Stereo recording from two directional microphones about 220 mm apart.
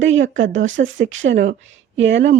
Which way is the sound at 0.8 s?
60° right (ahead or behind).